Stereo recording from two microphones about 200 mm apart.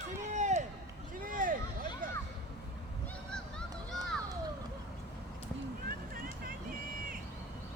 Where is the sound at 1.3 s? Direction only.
40° right (ahead or behind).